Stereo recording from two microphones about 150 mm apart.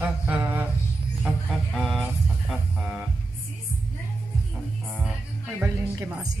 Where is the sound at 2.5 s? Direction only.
5° right (ahead or behind).